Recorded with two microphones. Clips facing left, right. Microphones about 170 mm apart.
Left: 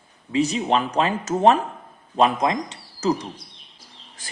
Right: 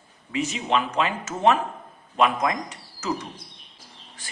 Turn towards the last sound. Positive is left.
turn(degrees=30)  # may be behind; listen again after turning